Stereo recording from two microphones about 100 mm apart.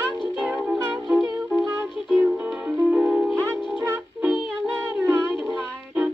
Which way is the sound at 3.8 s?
25° right (ahead or behind).